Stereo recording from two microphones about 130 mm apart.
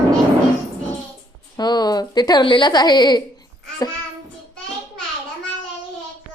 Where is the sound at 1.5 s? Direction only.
30° left (ahead or behind).